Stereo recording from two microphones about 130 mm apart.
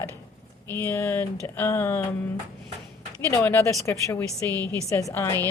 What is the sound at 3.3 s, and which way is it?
Speech, 20° left (ahead or behind).